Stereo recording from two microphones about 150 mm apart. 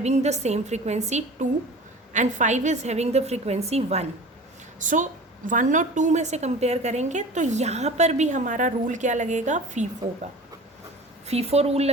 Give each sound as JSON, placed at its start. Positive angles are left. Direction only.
{"t": 0.0, "sound": "a woman's voice", "side_deg": -50}
{"t": 4.8, "sound": "a woman's voice", "side_deg": -60}
{"t": 11.3, "sound": "a woman's voice", "side_deg": -45}